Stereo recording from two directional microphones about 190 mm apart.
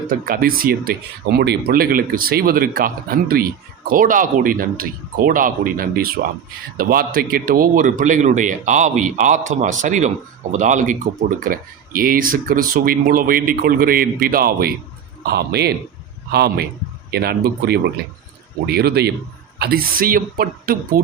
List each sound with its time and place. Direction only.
0.1 s speech: 50° right (ahead or behind)